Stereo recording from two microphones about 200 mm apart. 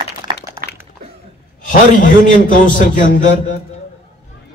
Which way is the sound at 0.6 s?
50° right (ahead or behind).